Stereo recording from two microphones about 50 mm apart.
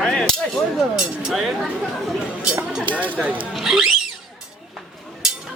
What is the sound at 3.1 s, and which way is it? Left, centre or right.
Speech, right.